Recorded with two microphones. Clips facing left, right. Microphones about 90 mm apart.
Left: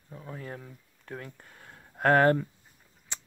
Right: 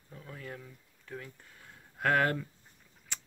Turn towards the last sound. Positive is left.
turn(degrees=25)  # may be behind; listen again after turning